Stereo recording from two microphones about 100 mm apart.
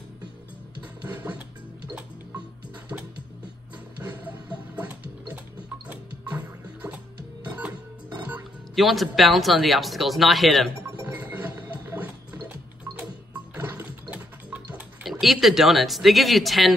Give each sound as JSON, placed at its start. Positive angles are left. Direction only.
{"t": 1.0, "sound": "music", "side_deg": -15}
{"t": 2.9, "sound": "music", "side_deg": -20}
{"t": 4.2, "sound": "music", "side_deg": -15}
{"t": 8.7, "sound": "speech", "side_deg": 0}
{"t": 11.1, "sound": "music", "side_deg": -15}
{"t": 15.0, "sound": "speech", "side_deg": 0}